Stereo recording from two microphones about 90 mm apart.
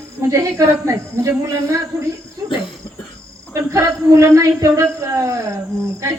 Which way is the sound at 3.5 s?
35° right (ahead or behind).